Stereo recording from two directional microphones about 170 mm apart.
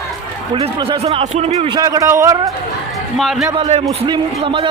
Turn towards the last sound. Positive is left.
turn(degrees=-30)  # may be behind; listen again after turning